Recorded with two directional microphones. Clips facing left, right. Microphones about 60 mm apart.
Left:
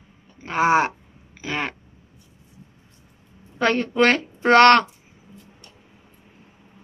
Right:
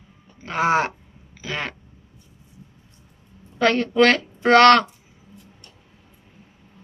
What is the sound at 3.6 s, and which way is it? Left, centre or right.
Speech, left.